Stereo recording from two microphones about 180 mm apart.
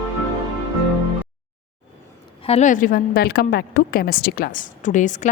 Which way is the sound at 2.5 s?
40° left (ahead or behind).